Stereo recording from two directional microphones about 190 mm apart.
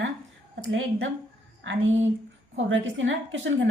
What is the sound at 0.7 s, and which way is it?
Speech, 90° right.